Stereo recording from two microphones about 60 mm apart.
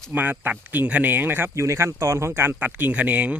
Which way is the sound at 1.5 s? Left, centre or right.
Right.